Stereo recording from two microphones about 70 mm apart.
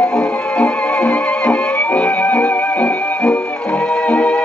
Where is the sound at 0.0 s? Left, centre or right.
Centre.